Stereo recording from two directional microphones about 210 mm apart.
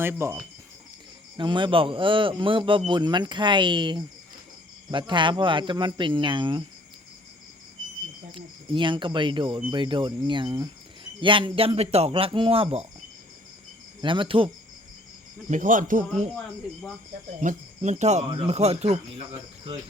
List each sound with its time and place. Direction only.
0.0 s speech: 10° right (ahead or behind)
1.4 s speech: 25° right (ahead or behind)
8.3 s speech: 25° right (ahead or behind)
14.0 s speech: 25° right (ahead or behind)
15.4 s speech: 35° right (ahead or behind)
16.3 s speech: 5° left (ahead or behind)
17.4 s speech: 35° right (ahead or behind)